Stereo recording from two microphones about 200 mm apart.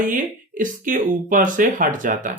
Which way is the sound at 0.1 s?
40° right (ahead or behind).